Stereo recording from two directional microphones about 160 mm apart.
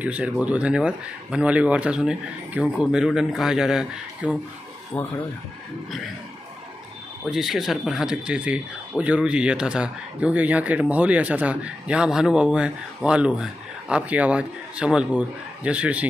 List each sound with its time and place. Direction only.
0.0 s speech: 10° right (ahead or behind)
4.9 s speech: 10° left (ahead or behind)
7.2 s speech: centre (ahead or behind)